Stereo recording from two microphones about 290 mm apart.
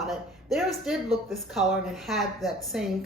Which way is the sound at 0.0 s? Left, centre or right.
Centre.